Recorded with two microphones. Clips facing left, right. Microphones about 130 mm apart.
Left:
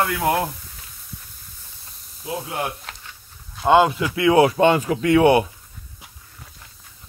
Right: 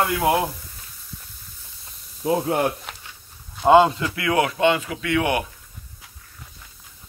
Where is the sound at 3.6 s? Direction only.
Centre (ahead or behind).